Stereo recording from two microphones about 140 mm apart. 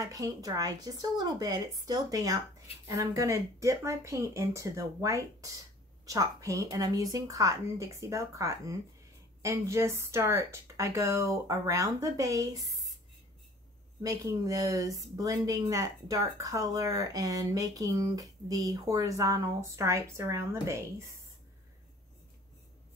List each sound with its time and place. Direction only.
0.0 s speech: 25° right (ahead or behind)
14.0 s speech: 25° right (ahead or behind)